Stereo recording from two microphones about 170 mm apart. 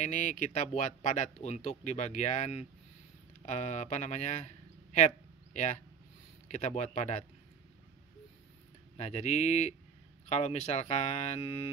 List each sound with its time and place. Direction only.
0.0 s speech: 45° left (ahead or behind)
4.9 s a sound: 40° left (ahead or behind)
6.5 s speech: 40° left (ahead or behind)
8.9 s speech: 40° left (ahead or behind)